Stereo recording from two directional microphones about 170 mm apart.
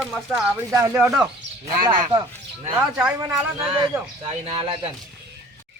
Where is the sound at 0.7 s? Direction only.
15° right (ahead or behind).